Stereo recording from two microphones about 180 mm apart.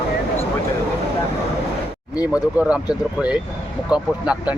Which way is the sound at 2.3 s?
5° right (ahead or behind).